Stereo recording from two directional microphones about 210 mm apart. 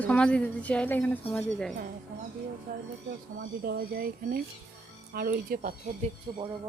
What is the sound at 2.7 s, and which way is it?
Speech, 45° right (ahead or behind).